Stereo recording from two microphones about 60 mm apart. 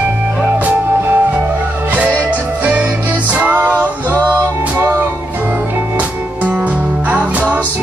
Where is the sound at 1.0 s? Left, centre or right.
Right.